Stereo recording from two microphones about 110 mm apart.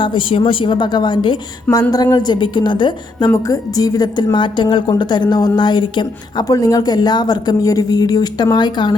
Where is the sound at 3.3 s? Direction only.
35° left (ahead or behind).